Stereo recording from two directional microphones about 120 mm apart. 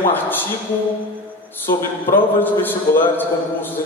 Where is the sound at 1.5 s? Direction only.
15° left (ahead or behind).